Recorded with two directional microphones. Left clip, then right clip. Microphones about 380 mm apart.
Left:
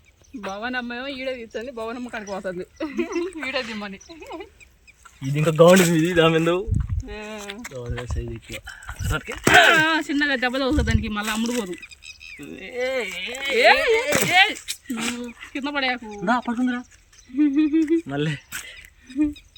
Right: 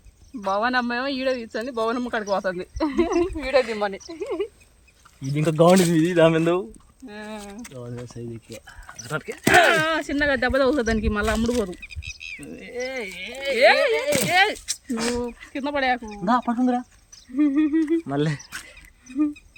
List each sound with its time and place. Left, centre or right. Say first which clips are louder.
0.5 s speech: right 7 dB; centre
2.0 s speech: right 7 dB; right
2.4 s speech: right 4 dB; centre
4.2 s speech: right 10 dB; centre